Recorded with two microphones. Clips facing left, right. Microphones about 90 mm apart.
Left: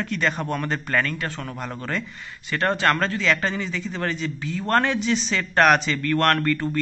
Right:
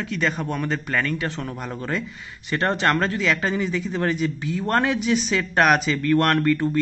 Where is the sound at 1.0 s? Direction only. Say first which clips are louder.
Right 3 dB; 20° right (ahead or behind).